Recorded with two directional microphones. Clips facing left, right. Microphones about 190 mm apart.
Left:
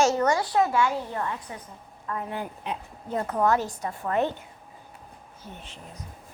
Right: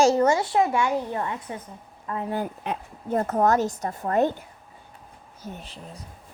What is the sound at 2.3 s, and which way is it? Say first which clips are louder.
A woman's voice: right 4 dB; 45° right (ahead or behind).